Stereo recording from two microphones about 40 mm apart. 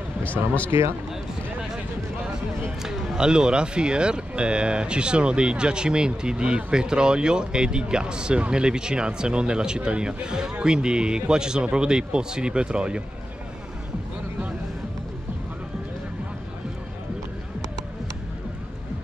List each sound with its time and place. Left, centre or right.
0.2 s speech: left
2.8 s speech: centre